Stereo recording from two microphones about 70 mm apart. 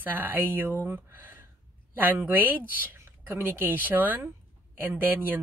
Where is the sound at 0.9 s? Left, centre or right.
Right.